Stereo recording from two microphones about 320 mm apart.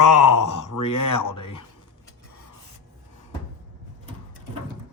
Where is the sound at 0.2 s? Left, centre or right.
Left.